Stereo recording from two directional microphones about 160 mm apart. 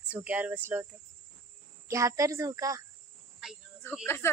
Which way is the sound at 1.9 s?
20° right (ahead or behind).